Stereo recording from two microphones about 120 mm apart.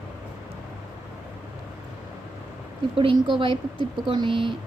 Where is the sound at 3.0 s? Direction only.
45° right (ahead or behind).